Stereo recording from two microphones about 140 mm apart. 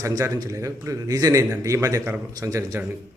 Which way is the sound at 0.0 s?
25° right (ahead or behind).